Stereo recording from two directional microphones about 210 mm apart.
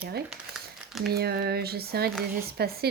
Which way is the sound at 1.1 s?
50° right (ahead or behind).